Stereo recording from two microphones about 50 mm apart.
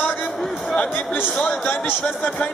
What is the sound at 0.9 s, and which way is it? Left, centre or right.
A man's voice, left.